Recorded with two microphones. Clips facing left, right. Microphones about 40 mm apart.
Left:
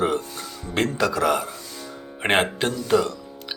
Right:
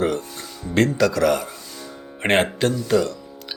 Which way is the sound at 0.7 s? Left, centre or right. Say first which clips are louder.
Right 4 dB; centre.